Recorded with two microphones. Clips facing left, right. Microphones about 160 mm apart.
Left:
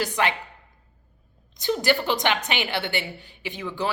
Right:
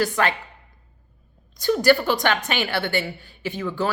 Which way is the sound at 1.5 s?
20° left (ahead or behind).